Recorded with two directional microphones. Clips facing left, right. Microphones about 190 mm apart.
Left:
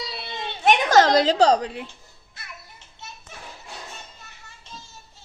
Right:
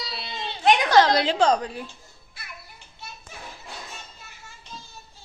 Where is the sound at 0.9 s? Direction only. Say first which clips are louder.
Left 4 dB; 45° left (ahead or behind); by 1.9 s 25° left (ahead or behind).